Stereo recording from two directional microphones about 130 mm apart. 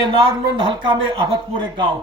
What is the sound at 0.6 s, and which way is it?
Speech, 40° right (ahead or behind).